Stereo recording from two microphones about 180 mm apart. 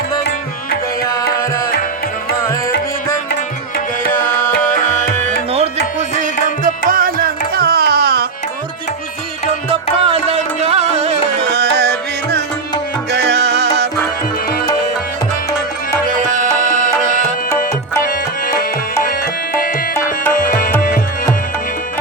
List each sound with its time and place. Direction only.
4.0 s tabla: 50° left (ahead or behind)
6.7 s music: 50° right (ahead or behind)
10.0 s music: 35° right (ahead or behind)
11.4 s music: 65° right (ahead or behind)
16.3 s tabla: 45° right (ahead or behind)
20.3 s music: 50° left (ahead or behind)